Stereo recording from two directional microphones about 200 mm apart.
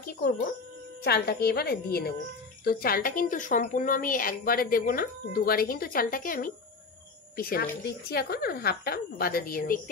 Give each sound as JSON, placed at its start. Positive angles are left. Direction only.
{"t": 1.0, "sound": "a woman's voice", "side_deg": 55}